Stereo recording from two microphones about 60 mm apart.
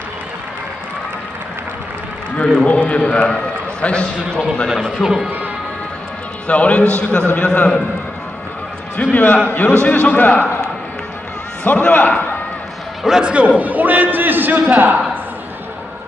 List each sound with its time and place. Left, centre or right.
2.4 s a man's voice: centre
5.0 s a man's voice: centre
6.4 s a man's voice: left
8.9 s a man's voice: left
11.6 s a man's voice: left
13.0 s a man's voice: centre
13.6 s a man's voice: right